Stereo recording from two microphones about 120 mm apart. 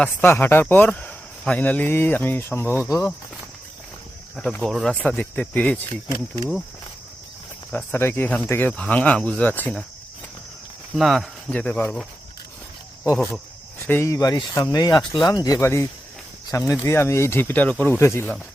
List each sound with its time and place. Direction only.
0.0 s speech: 15° left (ahead or behind)
4.4 s speech: 5° left (ahead or behind)
7.7 s speech: 10° left (ahead or behind)
10.9 s speech: centre (ahead or behind)
13.7 s speech: 20° left (ahead or behind)
14.1 s speech: 30° left (ahead or behind)